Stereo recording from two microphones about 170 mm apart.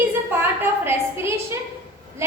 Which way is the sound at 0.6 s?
15° right (ahead or behind).